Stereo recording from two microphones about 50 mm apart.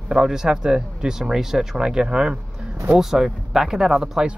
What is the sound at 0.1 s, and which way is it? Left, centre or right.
Speech, centre.